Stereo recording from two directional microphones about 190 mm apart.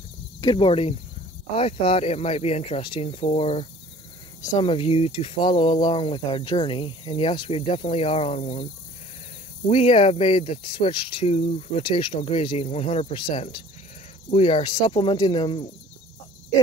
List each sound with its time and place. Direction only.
0.4 s speech: 25° left (ahead or behind)
9.7 s speech: 30° left (ahead or behind)